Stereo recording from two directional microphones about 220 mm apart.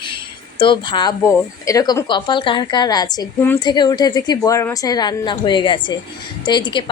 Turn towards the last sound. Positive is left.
turn(degrees=20)  # may be behind; listen again after turning